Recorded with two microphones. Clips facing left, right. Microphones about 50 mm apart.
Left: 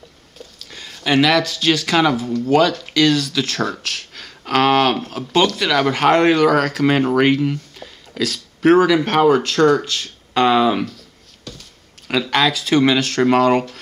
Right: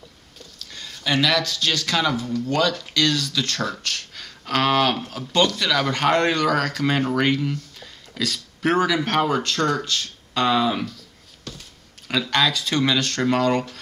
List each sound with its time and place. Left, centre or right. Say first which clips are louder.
0.7 s a sound: left 5 dB; centre
1.4 s speech: left 6 dB; centre
5.9 s speech: left 7 dB; centre
10.4 s speech: left 5 dB; left
12.3 s speech: left 5 dB; centre